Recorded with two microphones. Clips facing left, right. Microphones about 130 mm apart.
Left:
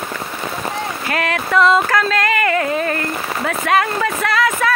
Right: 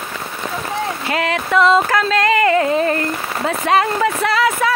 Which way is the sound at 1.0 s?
20° right (ahead or behind).